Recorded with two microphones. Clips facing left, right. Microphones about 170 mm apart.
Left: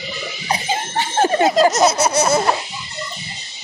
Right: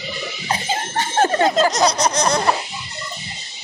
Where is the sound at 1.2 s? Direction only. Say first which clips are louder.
Left 3 dB; 20° left (ahead or behind).